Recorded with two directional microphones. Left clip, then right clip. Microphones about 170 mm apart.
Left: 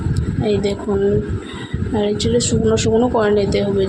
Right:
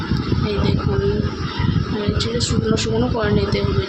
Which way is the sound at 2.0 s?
40° left (ahead or behind).